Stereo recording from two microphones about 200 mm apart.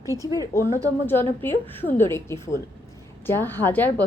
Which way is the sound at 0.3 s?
15° left (ahead or behind).